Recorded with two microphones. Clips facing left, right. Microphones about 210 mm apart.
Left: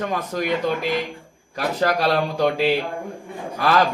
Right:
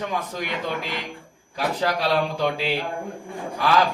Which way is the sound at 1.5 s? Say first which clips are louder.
Left 3 dB; 50° left (ahead or behind).